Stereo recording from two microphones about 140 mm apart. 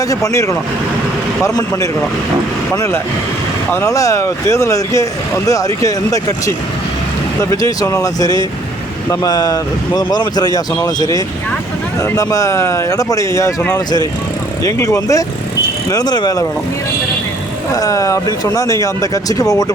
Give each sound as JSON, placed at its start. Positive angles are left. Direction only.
{"t": 0.1, "sound": "speech", "side_deg": 20}
{"t": 7.5, "sound": "speech", "side_deg": 25}
{"t": 14.6, "sound": "speech", "side_deg": 25}
{"t": 17.7, "sound": "speech", "side_deg": 25}